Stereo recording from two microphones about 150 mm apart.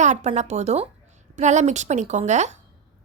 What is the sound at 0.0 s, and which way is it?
A woman's voice, 50° right (ahead or behind).